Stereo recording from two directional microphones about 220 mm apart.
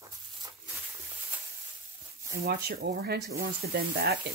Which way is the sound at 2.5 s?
45° right (ahead or behind).